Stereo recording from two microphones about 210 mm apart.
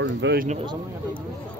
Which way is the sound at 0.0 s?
60° right (ahead or behind).